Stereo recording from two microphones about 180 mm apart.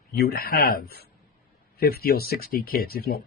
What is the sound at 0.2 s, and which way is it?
Speech, 60° left (ahead or behind).